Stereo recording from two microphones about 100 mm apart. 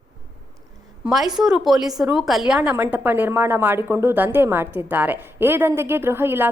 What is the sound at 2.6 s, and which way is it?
A woman's voice, 20° right (ahead or behind).